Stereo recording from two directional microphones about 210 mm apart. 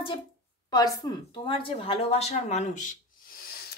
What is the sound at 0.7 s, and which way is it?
Speech, 20° left (ahead or behind).